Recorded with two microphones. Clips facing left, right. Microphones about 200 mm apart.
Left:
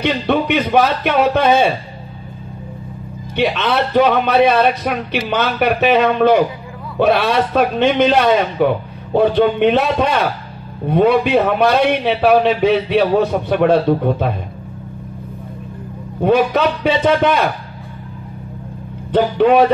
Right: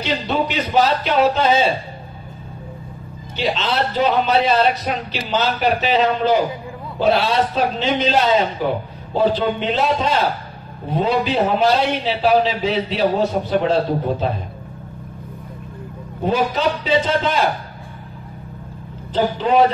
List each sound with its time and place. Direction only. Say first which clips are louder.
0.0 s a man's voice: left 4 dB; 60° left (ahead or behind)
3.3 s a man's voice: left 4 dB; 60° left (ahead or behind)
16.3 s a man's voice: left 5 dB; 60° left (ahead or behind)
19.1 s a man's voice: left 5 dB; 60° left (ahead or behind)